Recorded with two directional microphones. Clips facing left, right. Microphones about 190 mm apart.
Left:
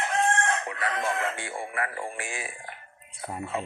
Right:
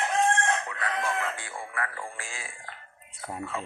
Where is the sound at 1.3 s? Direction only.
25° left (ahead or behind).